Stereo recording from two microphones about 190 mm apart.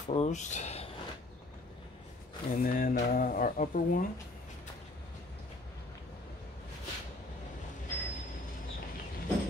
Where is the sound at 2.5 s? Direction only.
50° left (ahead or behind).